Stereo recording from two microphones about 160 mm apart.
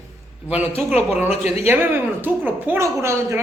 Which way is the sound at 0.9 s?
10° right (ahead or behind).